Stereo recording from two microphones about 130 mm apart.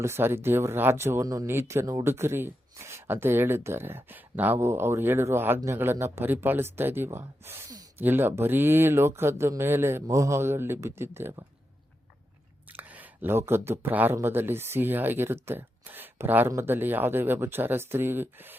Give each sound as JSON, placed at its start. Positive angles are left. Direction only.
{"t": 0.0, "sound": "speech", "side_deg": -20}
{"t": 12.7, "sound": "speech", "side_deg": -15}